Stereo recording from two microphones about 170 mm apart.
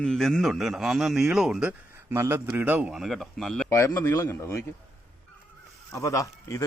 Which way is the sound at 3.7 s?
15° left (ahead or behind).